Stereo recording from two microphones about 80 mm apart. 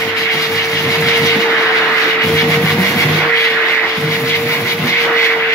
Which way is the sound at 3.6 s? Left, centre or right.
Left.